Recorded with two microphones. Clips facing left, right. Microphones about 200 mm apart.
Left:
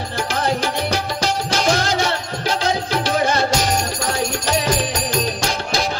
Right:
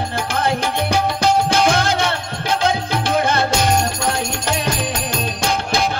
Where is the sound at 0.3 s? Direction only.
55° right (ahead or behind).